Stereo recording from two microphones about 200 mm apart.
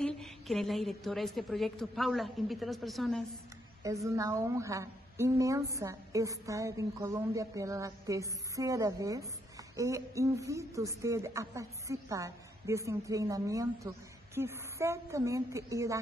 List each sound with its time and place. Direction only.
0.0 s a woman's voice: centre (ahead or behind)
3.8 s speech: 15° right (ahead or behind)